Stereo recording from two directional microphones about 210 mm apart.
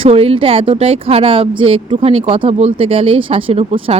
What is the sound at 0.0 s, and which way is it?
Speech, 25° right (ahead or behind).